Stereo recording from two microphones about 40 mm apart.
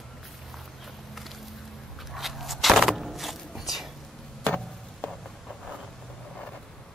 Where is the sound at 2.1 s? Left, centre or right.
Centre.